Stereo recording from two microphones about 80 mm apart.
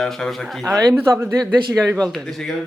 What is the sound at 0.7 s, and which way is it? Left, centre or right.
Speech, right.